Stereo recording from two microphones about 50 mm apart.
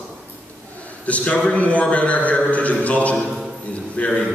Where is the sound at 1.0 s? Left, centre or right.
Left.